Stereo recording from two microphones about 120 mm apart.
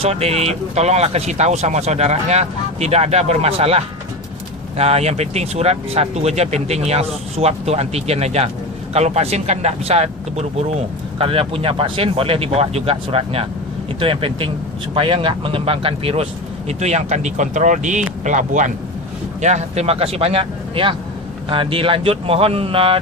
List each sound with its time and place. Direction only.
0.0 s speech: 60° right (ahead or behind)
16.6 s speech: 70° right (ahead or behind); by 18.7 s 90° right
19.4 s speech: 75° right (ahead or behind); by 23.0 s 50° right (ahead or behind)